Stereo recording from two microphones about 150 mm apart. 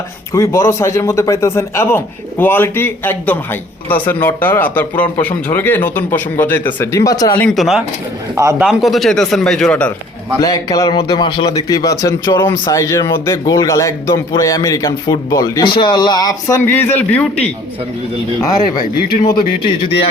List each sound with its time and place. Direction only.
0.3 s a man's voice: 20° left (ahead or behind)
7.5 s speech: centre (ahead or behind)
10.4 s speech: 25° left (ahead or behind)
16.6 s a man's voice: 15° left (ahead or behind)
18.4 s speech: 25° left (ahead or behind)